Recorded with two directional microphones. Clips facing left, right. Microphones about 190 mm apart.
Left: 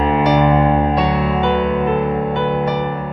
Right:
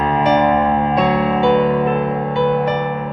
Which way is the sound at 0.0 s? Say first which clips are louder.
Left 1 dB; 20° left (ahead or behind).